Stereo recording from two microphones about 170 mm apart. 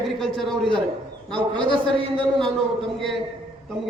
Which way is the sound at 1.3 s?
30° right (ahead or behind).